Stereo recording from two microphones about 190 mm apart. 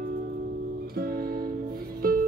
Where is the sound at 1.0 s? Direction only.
50° right (ahead or behind).